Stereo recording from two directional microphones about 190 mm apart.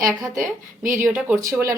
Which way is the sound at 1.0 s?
5° right (ahead or behind).